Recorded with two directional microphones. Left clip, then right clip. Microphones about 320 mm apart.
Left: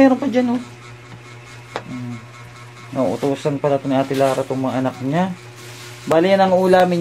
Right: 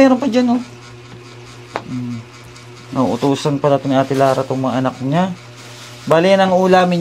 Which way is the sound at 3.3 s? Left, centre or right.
Centre.